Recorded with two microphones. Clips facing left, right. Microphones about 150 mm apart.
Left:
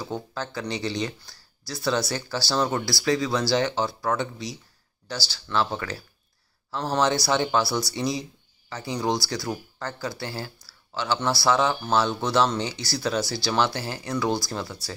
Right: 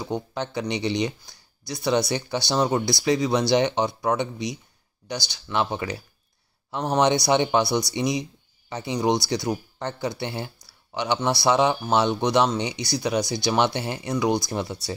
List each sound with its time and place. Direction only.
0.0 s speech: 20° right (ahead or behind)